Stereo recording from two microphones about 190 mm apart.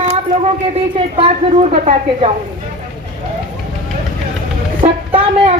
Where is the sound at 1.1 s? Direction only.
35° right (ahead or behind).